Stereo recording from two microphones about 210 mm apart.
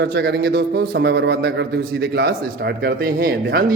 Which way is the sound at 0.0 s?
55° right (ahead or behind).